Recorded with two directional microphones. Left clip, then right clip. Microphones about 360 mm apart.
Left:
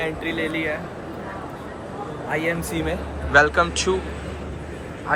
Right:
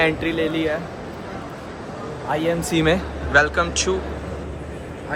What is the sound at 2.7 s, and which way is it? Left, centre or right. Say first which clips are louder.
Speech: right 7 dB; right.